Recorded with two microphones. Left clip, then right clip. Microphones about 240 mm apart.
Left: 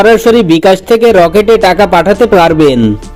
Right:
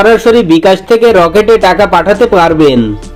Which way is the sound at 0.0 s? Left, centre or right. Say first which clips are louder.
Even; left.